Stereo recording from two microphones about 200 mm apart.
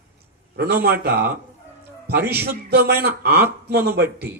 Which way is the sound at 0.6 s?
50° right (ahead or behind).